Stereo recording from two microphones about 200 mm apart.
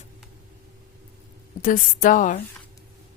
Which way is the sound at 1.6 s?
40° left (ahead or behind).